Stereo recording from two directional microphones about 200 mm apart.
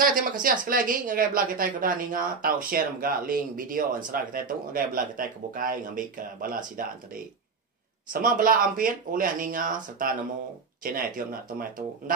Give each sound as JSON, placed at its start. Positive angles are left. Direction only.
{"t": 0.0, "sound": "speech", "side_deg": -45}